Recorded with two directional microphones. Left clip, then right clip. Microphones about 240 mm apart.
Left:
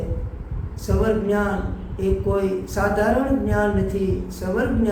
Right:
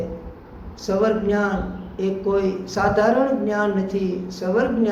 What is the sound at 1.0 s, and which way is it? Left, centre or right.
A man's voice, centre.